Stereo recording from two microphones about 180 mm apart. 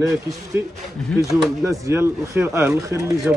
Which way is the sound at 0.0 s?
15° right (ahead or behind).